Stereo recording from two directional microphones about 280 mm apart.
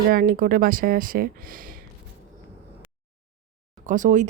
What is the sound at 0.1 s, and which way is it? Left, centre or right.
Speech, right.